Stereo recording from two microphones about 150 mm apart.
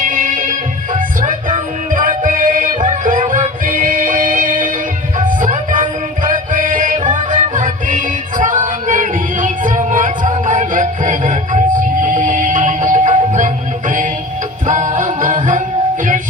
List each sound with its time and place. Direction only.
0.0 s music: 65° right (ahead or behind)
14.7 s music: 55° right (ahead or behind)